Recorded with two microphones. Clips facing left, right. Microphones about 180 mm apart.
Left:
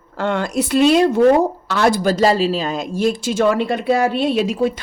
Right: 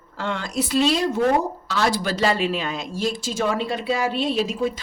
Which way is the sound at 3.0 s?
65° left (ahead or behind).